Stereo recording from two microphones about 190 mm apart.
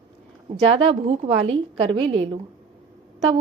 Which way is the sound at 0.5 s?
30° right (ahead or behind).